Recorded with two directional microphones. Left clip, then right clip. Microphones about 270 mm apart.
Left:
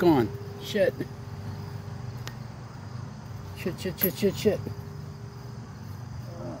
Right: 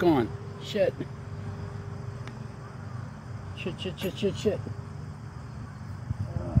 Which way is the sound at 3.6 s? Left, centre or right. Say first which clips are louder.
Left 3 dB; left.